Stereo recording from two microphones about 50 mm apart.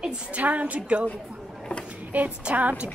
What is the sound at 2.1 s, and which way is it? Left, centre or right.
Speech, right.